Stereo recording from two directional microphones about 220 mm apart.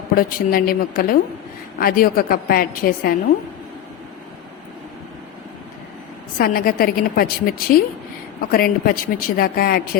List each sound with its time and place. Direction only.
0.2 s a woman's voice: 40° left (ahead or behind)
6.4 s a woman's voice: 40° left (ahead or behind)